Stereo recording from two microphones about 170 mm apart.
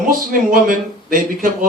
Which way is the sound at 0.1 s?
55° right (ahead or behind).